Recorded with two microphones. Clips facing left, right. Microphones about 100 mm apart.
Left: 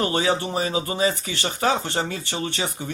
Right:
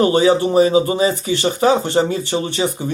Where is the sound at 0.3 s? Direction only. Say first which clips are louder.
Right 10 dB; 20° right (ahead or behind).